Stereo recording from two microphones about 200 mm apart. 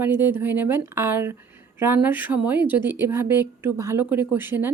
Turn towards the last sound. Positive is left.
turn(degrees=-10)  # may be behind; listen again after turning